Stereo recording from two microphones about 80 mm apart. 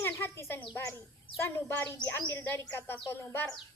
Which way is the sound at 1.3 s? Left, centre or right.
Left.